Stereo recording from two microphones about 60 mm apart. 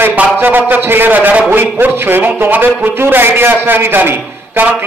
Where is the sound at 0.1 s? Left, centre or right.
Right.